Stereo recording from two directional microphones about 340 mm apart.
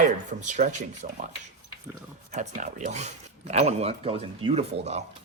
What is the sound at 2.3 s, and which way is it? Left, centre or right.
Speech, right.